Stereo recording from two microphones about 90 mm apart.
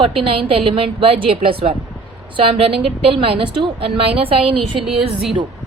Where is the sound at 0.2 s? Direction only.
90° right.